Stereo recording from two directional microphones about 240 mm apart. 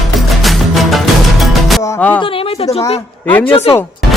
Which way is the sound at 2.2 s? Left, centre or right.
Left.